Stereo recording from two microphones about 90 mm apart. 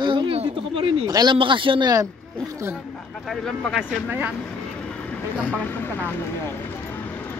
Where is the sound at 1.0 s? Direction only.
50° right (ahead or behind); by 1.9 s 65° right (ahead or behind).